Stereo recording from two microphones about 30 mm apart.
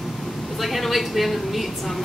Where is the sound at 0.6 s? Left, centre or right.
Centre.